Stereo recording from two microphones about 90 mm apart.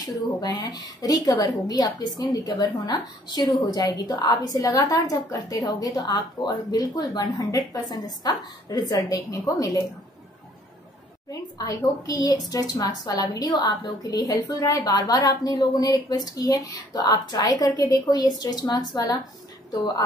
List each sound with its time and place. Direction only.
0.4 s a woman's voice: 45° left (ahead or behind)
11.2 s a woman's voice: 40° left (ahead or behind)